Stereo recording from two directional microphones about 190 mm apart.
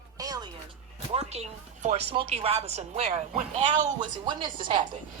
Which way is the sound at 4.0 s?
25° right (ahead or behind).